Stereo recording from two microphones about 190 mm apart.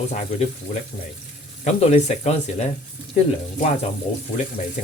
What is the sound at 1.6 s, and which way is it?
Speech, 35° left (ahead or behind).